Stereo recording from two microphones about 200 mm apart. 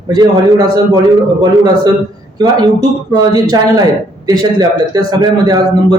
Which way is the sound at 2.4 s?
20° right (ahead or behind).